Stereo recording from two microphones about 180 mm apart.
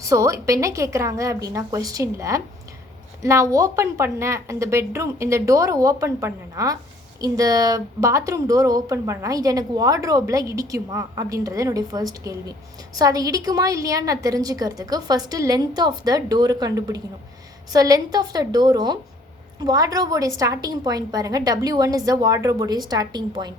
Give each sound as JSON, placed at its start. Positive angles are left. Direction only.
{"t": 0.0, "sound": "a woman's voice", "side_deg": -20}